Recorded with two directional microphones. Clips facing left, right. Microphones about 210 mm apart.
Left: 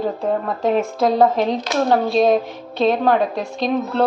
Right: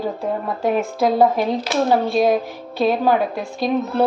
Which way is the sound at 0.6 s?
25° left (ahead or behind).